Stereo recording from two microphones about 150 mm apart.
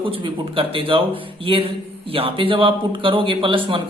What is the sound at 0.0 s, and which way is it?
Speech, 35° right (ahead or behind).